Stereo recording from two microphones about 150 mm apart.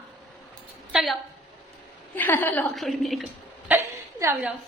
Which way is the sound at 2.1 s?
15° left (ahead or behind).